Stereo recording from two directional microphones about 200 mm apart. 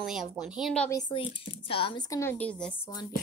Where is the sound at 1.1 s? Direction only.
25° left (ahead or behind); by 2.8 s 5° left (ahead or behind).